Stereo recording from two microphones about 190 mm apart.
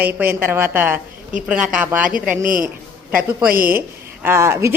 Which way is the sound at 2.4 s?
45° right (ahead or behind).